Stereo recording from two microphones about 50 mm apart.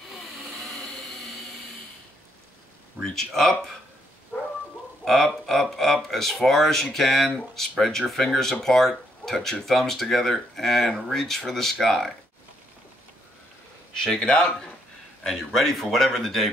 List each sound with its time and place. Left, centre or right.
0.1 s train: centre
3.0 s speech: centre
5.0 s speech: centre
14.0 s speech: centre